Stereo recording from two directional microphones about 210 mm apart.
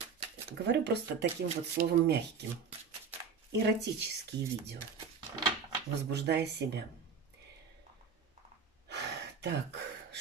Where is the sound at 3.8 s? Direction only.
55° right (ahead or behind).